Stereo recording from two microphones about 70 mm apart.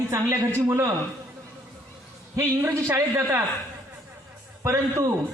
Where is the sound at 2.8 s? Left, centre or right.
Right.